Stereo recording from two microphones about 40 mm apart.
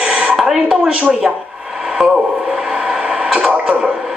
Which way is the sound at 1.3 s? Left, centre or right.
Right.